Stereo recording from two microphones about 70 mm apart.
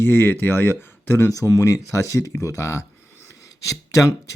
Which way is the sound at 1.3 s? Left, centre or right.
Left.